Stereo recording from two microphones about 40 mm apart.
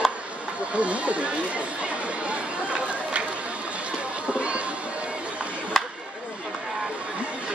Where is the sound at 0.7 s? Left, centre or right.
Right.